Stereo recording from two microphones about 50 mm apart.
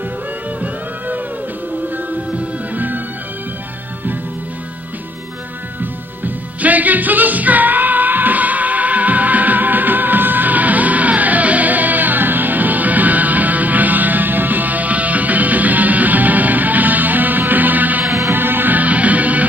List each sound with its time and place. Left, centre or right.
0.6 s music: right
2.3 s music: right
6.2 s music: right